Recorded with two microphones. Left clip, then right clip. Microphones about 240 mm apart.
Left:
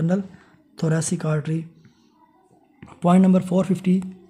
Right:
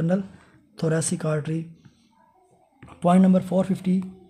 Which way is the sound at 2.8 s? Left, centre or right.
Centre.